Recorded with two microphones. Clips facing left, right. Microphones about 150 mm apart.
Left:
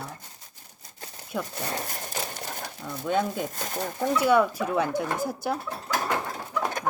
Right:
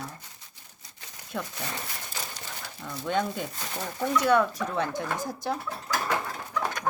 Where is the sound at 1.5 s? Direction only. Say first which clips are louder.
Left 4 dB; 45° left (ahead or behind).